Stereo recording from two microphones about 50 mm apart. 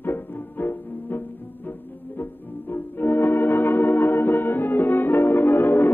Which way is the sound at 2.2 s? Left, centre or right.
Left.